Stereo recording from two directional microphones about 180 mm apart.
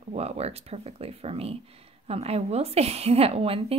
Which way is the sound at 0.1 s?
35° right (ahead or behind).